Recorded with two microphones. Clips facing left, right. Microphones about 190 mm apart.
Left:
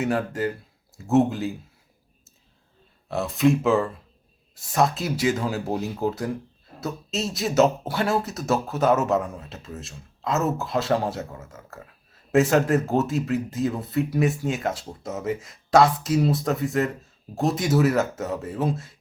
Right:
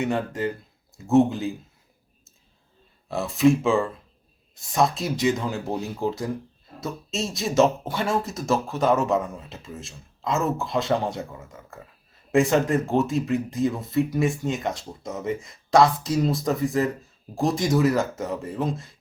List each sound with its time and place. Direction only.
0.0 s speech: 5° left (ahead or behind)
3.1 s speech: centre (ahead or behind)